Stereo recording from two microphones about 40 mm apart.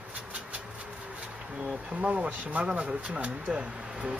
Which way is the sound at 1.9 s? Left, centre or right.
Right.